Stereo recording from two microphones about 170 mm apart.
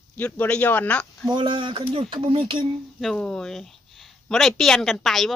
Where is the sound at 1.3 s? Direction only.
30° right (ahead or behind).